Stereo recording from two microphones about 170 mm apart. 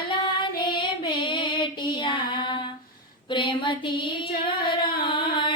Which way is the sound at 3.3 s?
30° left (ahead or behind).